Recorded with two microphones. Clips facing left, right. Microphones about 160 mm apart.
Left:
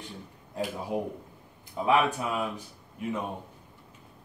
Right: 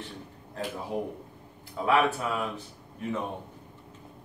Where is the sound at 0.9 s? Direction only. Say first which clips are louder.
Left 1 dB; 15° left (ahead or behind).